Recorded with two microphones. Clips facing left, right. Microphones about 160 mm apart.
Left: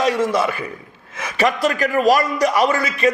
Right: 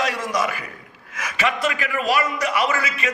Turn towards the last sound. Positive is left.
turn(degrees=35)  # may be behind; listen again after turning